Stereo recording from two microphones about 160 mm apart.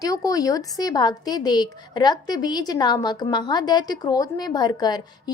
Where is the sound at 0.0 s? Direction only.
20° left (ahead or behind).